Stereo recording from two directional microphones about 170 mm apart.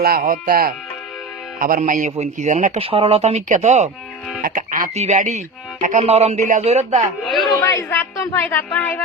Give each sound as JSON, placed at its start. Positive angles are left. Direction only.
{"t": 0.0, "sound": "a man's voice", "side_deg": -60}
{"t": 2.8, "sound": "speech", "side_deg": -35}
{"t": 4.4, "sound": "speech", "side_deg": -55}
{"t": 7.4, "sound": "a woman's voice", "side_deg": 20}